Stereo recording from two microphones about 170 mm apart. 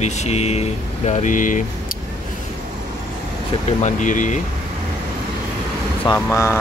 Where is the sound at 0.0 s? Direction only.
40° left (ahead or behind).